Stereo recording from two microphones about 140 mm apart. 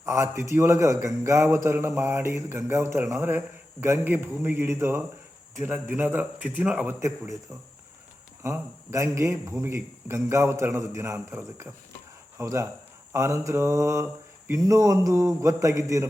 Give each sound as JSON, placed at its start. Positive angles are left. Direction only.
{"t": 0.0, "sound": "a man's voice", "side_deg": -20}
{"t": 8.4, "sound": "a man's voice", "side_deg": -20}